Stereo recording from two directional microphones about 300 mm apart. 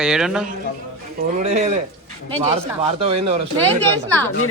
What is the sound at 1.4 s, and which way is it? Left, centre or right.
Speech, right.